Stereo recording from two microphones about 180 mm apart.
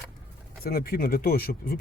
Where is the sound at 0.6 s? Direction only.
55° left (ahead or behind).